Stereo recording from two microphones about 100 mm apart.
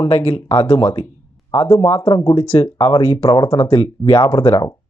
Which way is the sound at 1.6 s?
35° left (ahead or behind).